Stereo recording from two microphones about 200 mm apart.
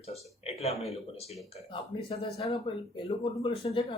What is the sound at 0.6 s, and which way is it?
Speech, 30° left (ahead or behind).